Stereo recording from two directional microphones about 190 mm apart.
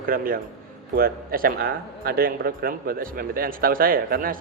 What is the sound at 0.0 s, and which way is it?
Speech, 50° right (ahead or behind).